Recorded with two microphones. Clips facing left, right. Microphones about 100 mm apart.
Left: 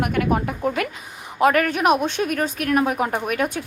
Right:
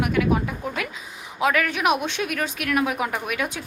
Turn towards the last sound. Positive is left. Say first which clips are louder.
# left 4 dB
turn(degrees=45)  # may be behind; listen again after turning